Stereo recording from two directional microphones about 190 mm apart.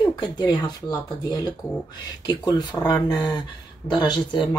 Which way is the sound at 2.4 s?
20° left (ahead or behind).